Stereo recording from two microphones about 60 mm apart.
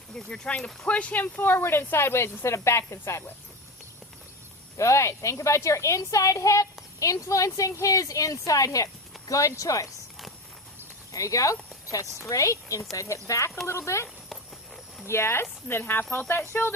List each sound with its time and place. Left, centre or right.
0.1 s a woman's voice: centre; by 3.2 s left
4.8 s a woman's voice: left
11.1 s a woman's voice: left
13.7 s a woman's voice: left